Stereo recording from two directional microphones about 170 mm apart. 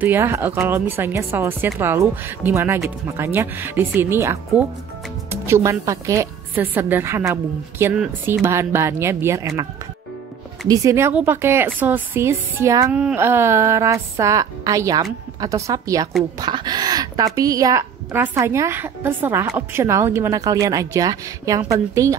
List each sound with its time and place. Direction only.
0.0 s a woman's voice: 15° right (ahead or behind)
10.7 s a woman's voice: 20° right (ahead or behind)